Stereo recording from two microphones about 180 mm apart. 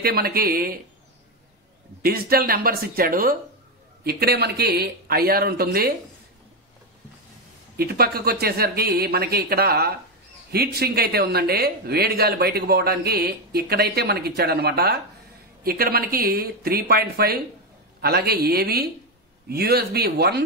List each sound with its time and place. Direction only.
0.0 s speech: 60° right (ahead or behind)
2.0 s speech: 55° right (ahead or behind)
7.7 s speech: 60° right (ahead or behind)